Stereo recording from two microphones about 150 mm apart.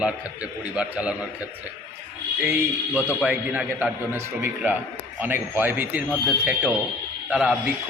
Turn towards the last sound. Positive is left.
turn(degrees=-10)  # may be behind; listen again after turning